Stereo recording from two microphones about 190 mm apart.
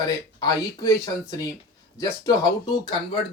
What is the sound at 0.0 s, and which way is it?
Speech, 20° left (ahead or behind).